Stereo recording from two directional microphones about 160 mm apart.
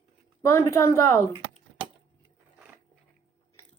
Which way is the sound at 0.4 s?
15° left (ahead or behind).